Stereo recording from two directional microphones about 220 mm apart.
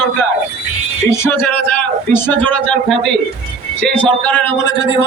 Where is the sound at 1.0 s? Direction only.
10° left (ahead or behind).